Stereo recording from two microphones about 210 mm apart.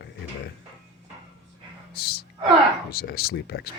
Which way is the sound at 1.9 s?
45° left (ahead or behind).